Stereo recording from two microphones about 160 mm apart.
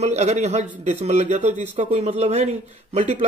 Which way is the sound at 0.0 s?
45° right (ahead or behind).